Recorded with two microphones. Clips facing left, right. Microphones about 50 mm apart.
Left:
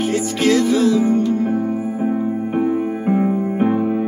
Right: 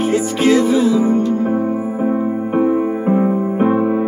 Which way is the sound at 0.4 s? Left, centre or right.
Centre.